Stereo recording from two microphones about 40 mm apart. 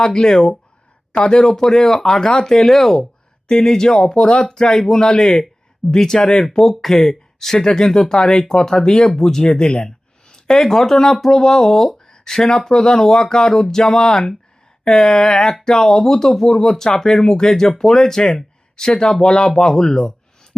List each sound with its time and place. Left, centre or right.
0.0 s speech: centre
9.4 s a sound: left
10.7 s speech: centre